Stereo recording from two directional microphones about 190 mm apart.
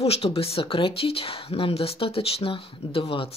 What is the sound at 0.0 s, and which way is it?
Speech, 30° left (ahead or behind).